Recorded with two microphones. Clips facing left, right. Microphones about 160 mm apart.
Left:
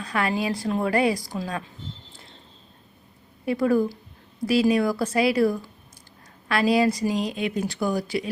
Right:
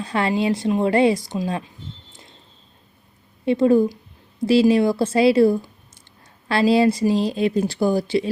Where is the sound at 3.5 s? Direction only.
25° right (ahead or behind).